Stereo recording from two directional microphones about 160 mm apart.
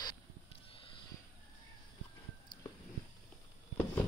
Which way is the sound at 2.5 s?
25° left (ahead or behind).